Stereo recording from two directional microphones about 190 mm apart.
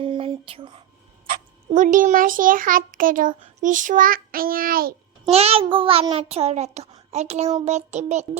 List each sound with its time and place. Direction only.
0.0 s a sound: 25° right (ahead or behind)
1.7 s a child's voice: 45° right (ahead or behind)
5.3 s a child's voice: 30° right (ahead or behind)